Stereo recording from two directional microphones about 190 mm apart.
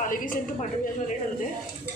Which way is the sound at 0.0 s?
45° left (ahead or behind).